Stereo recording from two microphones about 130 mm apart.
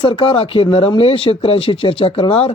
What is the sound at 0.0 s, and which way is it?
Speech, 45° left (ahead or behind).